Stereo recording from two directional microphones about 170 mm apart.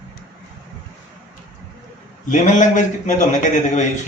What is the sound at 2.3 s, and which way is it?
Speech, 45° left (ahead or behind).